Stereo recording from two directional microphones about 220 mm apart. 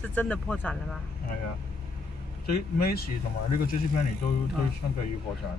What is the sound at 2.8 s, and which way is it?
Speech, 45° left (ahead or behind).